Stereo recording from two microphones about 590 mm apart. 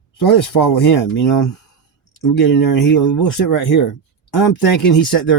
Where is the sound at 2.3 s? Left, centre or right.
Left.